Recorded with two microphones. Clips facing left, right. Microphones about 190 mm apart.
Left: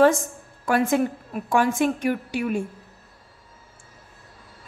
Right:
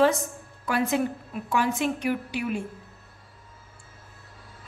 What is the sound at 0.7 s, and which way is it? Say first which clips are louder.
A woman's voice: left 4 dB; 50° left (ahead or behind).